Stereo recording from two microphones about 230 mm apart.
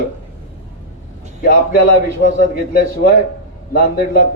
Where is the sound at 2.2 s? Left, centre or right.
Left.